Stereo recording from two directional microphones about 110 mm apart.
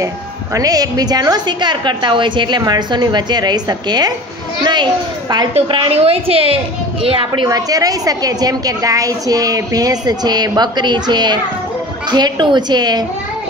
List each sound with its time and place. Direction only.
0.6 s a woman's voice: 35° right (ahead or behind)
5.7 s a woman's voice: 50° right (ahead or behind)
5.9 s a woman's voice: 60° right (ahead or behind)
7.4 s a woman's voice: 35° right (ahead or behind)